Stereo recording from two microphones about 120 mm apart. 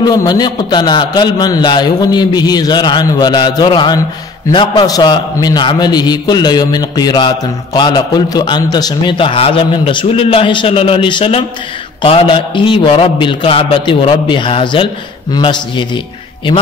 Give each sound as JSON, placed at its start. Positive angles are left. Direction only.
{"t": 0.0, "sound": "a man's voice", "side_deg": 35}